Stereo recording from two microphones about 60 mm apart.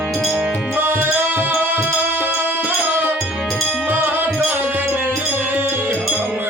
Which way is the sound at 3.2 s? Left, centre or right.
Centre.